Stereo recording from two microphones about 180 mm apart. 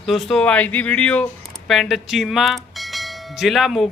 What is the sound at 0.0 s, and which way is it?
Speech, centre (ahead or behind).